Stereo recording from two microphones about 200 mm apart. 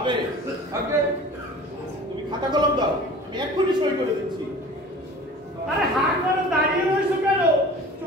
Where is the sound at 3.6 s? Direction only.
20° right (ahead or behind).